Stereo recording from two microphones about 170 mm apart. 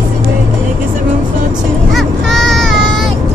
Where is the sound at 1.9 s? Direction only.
Centre (ahead or behind).